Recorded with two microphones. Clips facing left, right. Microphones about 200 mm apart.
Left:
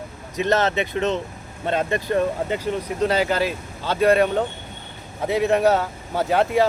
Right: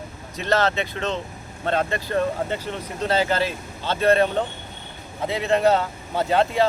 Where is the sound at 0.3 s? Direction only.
20° left (ahead or behind).